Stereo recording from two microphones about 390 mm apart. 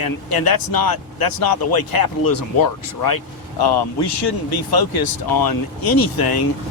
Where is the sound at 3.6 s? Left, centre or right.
Left.